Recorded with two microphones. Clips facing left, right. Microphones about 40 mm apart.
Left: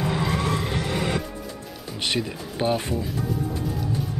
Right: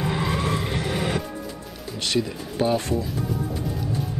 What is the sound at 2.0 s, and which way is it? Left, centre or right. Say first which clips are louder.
Speech: right 2 dB; left.